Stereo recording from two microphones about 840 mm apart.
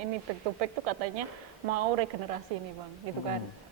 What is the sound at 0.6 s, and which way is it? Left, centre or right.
A woman's voice, right.